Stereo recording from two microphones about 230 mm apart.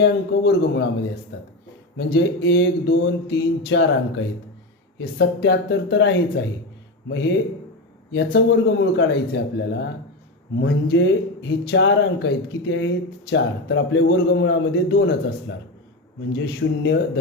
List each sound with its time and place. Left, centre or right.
0.0 s speech: left
2.0 s speech: left